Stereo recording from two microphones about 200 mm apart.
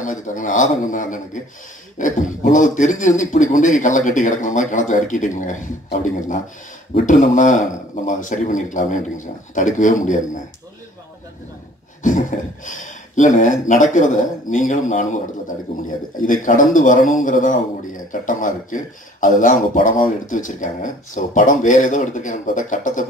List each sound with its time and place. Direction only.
0.0 s a man's voice: 40° left (ahead or behind)
12.0 s a man's voice: 40° left (ahead or behind)